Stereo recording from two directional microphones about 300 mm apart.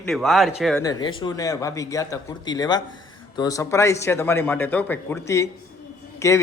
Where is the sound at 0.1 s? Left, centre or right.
Centre.